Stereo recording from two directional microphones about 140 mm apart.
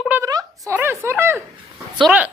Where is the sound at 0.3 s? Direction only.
30° right (ahead or behind).